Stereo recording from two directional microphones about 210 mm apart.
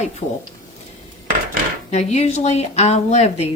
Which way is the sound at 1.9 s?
30° left (ahead or behind).